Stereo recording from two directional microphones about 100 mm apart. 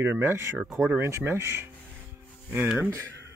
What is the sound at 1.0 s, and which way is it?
Speech, 25° right (ahead or behind).